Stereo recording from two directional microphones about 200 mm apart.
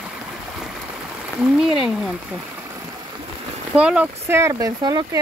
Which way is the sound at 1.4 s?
Centre (ahead or behind).